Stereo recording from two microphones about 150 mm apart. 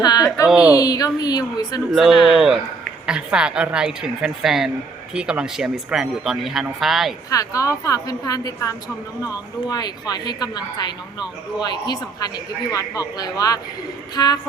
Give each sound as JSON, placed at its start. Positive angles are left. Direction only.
{"t": 0.0, "sound": "a woman's voice", "side_deg": 25}
{"t": 0.4, "sound": "speech", "side_deg": -5}
{"t": 0.7, "sound": "speech", "side_deg": 25}
{"t": 1.9, "sound": "speech", "side_deg": 0}
{"t": 7.3, "sound": "speech", "side_deg": 20}